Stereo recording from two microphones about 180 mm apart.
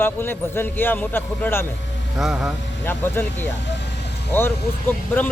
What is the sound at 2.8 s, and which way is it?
Speech, 10° left (ahead or behind).